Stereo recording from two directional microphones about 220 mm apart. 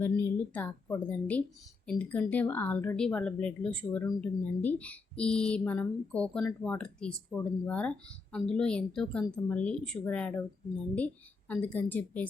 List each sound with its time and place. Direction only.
0.0 s speech: 10° left (ahead or behind)